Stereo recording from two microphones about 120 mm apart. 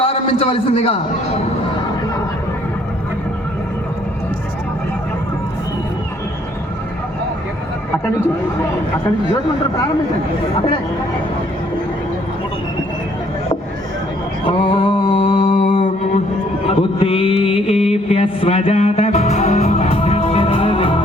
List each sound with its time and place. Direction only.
0.0 s a man's voice: 55° left (ahead or behind)
10.5 s speech: 40° left (ahead or behind)
14.7 s a sound: 45° left (ahead or behind)
15.6 s mantra: 85° left
16.6 s music: 55° left (ahead or behind)